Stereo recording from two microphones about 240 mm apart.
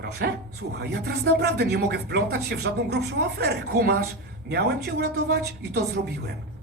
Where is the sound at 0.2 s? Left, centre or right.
Right.